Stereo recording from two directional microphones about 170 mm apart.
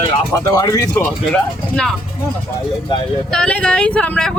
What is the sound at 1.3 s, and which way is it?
Speech, 5° left (ahead or behind).